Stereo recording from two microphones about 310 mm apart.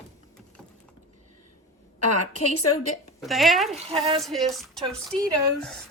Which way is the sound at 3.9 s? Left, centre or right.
Centre.